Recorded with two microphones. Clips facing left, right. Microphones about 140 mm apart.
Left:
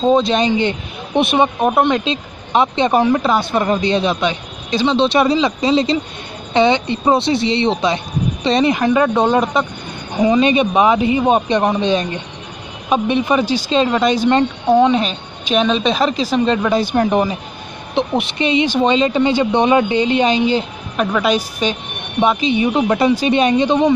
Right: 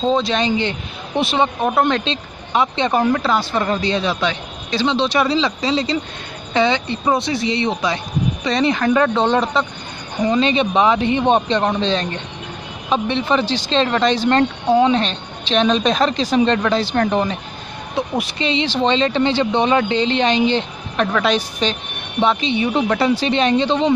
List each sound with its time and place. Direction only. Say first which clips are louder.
0.1 s a woman's voice: left 4 dB; 15° left (ahead or behind)
17.9 s speech: left 4 dB; 25° left (ahead or behind)